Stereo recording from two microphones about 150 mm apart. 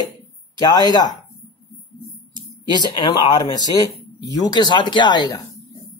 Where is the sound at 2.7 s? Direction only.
30° left (ahead or behind).